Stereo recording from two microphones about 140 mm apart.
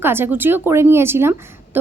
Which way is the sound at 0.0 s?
15° right (ahead or behind).